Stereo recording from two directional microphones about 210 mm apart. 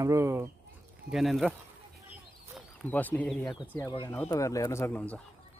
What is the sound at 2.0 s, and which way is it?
Chicken, centre (ahead or behind).